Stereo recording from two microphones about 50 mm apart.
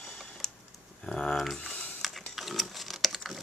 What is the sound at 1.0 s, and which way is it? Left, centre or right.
Speech, centre.